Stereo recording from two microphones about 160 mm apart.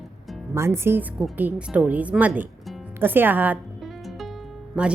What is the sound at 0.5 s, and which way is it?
Speech, 15° right (ahead or behind).